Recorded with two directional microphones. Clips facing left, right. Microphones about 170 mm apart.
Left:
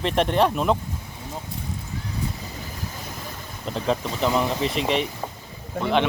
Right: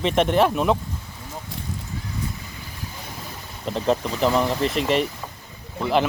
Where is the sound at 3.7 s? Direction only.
Centre (ahead or behind).